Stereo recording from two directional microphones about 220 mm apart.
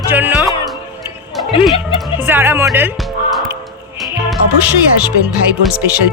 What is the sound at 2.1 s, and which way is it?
Speech, 10° right (ahead or behind).